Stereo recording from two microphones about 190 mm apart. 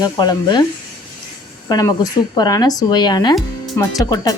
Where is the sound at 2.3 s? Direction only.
20° left (ahead or behind).